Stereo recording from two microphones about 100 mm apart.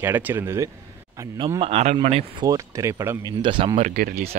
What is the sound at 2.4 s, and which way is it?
Speech, 35° right (ahead or behind).